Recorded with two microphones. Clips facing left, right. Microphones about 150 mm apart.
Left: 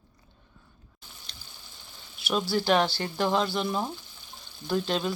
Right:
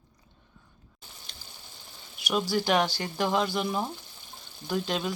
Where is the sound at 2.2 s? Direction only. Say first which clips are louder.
Left 1 dB; 15° right (ahead or behind).